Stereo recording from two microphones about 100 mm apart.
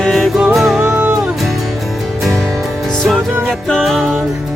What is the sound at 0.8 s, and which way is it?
Music, 15° right (ahead or behind).